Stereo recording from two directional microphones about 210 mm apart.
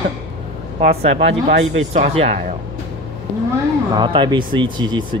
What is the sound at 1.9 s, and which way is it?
Speech, 30° right (ahead or behind).